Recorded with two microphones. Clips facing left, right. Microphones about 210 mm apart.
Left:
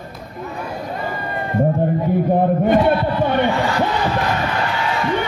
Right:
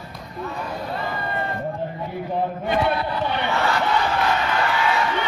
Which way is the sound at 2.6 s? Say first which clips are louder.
Left 7 dB; 50° left (ahead or behind).